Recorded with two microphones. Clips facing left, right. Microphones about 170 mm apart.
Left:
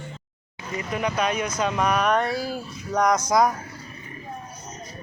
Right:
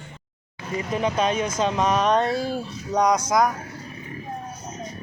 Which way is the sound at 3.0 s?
10° right (ahead or behind).